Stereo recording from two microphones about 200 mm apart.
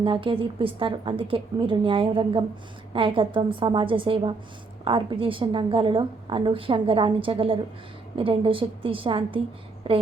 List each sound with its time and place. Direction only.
0.0 s a woman's voice: 25° right (ahead or behind)